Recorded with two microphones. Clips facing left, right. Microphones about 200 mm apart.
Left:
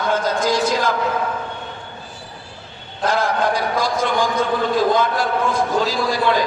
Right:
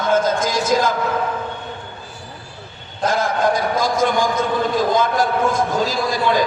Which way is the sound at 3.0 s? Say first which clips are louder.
Even; 45° right (ahead or behind).